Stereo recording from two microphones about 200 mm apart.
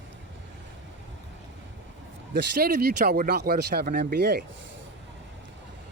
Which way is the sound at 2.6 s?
50° right (ahead or behind).